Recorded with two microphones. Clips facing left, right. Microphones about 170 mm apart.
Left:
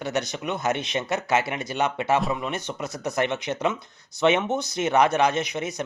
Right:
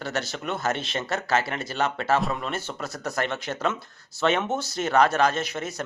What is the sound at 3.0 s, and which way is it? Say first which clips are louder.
A man's voice: left 3 dB; 20° left (ahead or behind).